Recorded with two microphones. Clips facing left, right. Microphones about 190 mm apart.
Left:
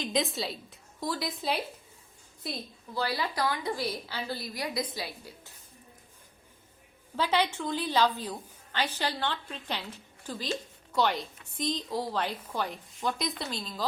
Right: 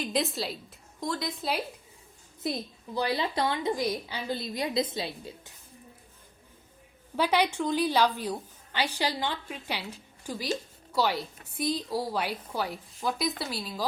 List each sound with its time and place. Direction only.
0.0 s a woman's voice: centre (ahead or behind)
2.4 s a woman's voice: 20° right (ahead or behind)
7.2 s a woman's voice: 15° right (ahead or behind)